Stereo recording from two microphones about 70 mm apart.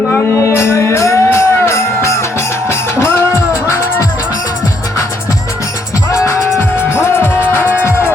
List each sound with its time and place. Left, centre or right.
0.3 s music: left
6.1 s music: left